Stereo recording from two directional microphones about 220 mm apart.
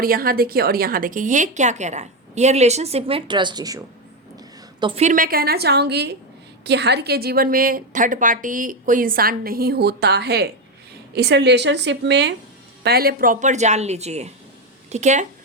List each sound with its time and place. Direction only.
0.0 s a woman's voice: 40° right (ahead or behind)